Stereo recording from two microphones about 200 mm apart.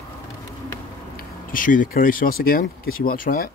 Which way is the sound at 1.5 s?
40° left (ahead or behind).